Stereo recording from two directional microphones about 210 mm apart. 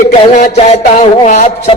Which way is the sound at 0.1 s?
35° left (ahead or behind).